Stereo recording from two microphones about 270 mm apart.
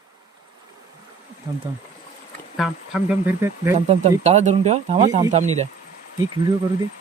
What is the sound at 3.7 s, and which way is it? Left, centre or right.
Speech, right.